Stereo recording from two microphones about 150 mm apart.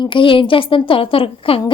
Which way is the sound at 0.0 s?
35° left (ahead or behind).